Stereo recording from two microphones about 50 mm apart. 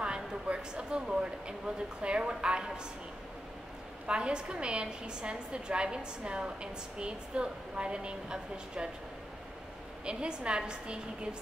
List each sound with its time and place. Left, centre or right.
0.0 s a sound: centre
2.0 s a woman's voice: centre
4.1 s a woman's voice: centre
10.0 s a woman's voice: centre